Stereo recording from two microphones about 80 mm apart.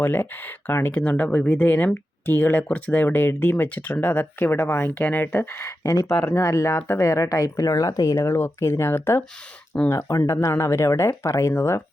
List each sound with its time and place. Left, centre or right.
0.0 s speech: left
0.9 s speech: centre
7.0 s speech: left